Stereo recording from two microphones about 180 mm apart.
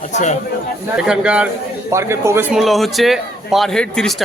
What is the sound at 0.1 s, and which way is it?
Speech, 40° left (ahead or behind).